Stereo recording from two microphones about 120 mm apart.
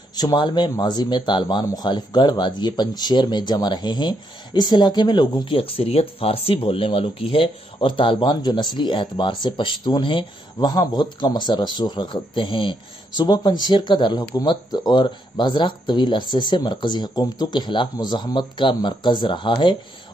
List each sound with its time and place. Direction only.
0.1 s speech: 35° left (ahead or behind)